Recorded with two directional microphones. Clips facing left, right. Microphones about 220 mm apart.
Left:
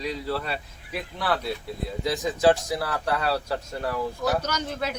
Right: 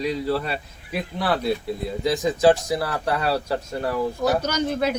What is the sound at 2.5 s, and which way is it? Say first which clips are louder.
Speech: right 1 dB; 5° right (ahead or behind).